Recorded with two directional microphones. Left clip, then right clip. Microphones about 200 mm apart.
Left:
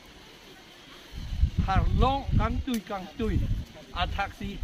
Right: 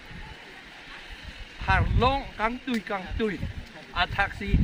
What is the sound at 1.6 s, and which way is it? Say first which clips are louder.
Speech: right 4 dB; 10° right (ahead or behind).